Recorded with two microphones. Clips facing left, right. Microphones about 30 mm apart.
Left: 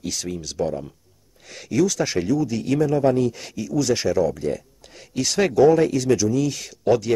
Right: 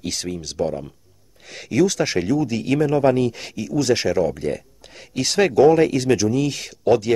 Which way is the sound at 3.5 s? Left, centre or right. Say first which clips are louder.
Right 3 dB; right.